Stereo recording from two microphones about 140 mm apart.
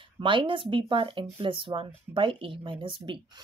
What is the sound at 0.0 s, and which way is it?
Speech, 35° right (ahead or behind).